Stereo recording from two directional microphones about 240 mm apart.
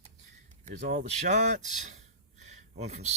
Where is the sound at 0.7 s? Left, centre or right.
Right.